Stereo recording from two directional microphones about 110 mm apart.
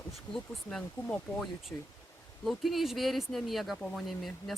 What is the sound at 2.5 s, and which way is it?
Speech, centre (ahead or behind).